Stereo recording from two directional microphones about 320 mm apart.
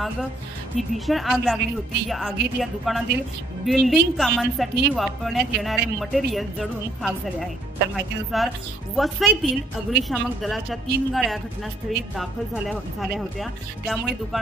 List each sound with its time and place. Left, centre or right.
0.7 s a woman's voice: centre